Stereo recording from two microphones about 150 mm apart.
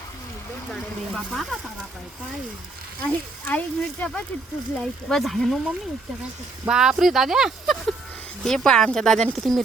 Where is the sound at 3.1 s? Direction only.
10° left (ahead or behind).